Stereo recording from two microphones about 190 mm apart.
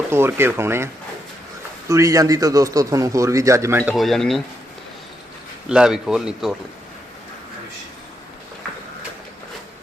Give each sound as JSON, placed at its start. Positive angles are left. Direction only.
{"t": 0.1, "sound": "speech", "side_deg": -15}
{"t": 1.9, "sound": "speech", "side_deg": -15}
{"t": 3.9, "sound": "speech", "side_deg": 0}
{"t": 5.6, "sound": "speech", "side_deg": -5}